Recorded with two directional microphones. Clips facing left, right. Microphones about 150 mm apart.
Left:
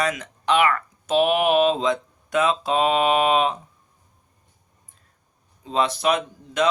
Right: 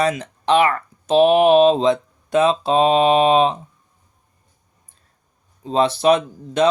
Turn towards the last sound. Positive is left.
turn(degrees=-30)  # may be behind; listen again after turning